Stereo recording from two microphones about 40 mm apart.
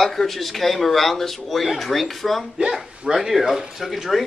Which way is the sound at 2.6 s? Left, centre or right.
Centre.